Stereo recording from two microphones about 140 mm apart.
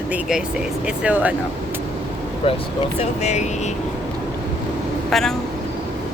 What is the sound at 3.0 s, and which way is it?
Speech, 55° left (ahead or behind).